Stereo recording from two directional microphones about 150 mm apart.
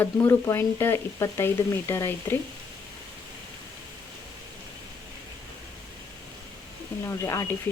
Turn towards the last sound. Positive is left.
turn(degrees=15)  # may be behind; listen again after turning